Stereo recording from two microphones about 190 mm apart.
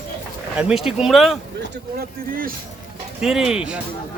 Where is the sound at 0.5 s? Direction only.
Centre (ahead or behind).